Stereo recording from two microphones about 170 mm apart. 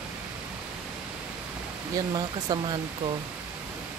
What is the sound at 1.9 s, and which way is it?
Speech, 25° right (ahead or behind).